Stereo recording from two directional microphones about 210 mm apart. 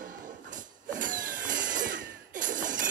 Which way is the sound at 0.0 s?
40° right (ahead or behind).